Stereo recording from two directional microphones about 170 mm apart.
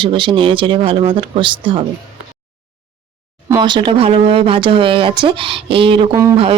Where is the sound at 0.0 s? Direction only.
30° right (ahead or behind).